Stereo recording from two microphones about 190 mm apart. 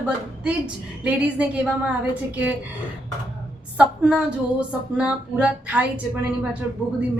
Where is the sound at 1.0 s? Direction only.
5° right (ahead or behind).